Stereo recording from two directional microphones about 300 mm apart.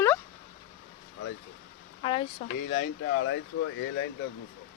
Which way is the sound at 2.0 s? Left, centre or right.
Centre.